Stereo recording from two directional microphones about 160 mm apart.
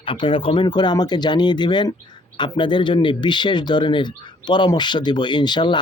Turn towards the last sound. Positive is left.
turn(degrees=30)  # may be behind; listen again after turning